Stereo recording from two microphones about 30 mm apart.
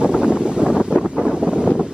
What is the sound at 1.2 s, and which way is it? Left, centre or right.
Wind noise, right.